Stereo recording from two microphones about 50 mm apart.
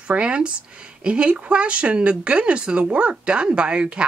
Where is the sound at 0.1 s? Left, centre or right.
Right.